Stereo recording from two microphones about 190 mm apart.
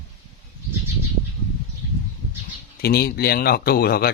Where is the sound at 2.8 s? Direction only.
55° left (ahead or behind).